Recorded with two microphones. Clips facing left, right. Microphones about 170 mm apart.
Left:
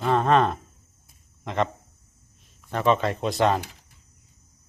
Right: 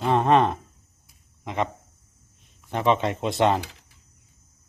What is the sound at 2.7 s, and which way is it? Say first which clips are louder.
Speech: even; 20° right (ahead or behind).